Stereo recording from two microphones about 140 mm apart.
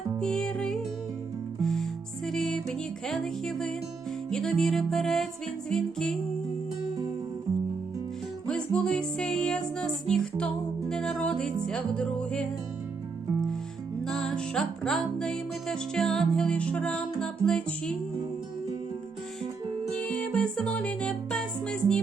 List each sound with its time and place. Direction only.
0.2 s music: 5° left (ahead or behind)
8.4 s music: 5° left (ahead or behind)
14.1 s music: 5° left (ahead or behind)
20.1 s music: 5° left (ahead or behind)